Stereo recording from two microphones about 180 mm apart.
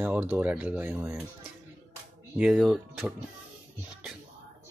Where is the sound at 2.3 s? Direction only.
5° right (ahead or behind).